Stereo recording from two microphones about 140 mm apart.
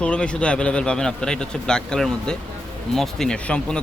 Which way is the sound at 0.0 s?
5° left (ahead or behind).